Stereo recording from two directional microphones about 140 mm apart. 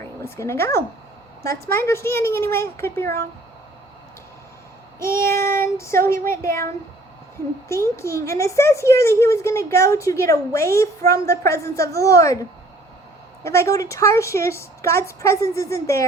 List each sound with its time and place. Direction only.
0.2 s speech: 20° left (ahead or behind)
1.9 s speech: 20° left (ahead or behind)
4.9 s child singing: 20° left (ahead or behind)
7.7 s speech: 20° left (ahead or behind)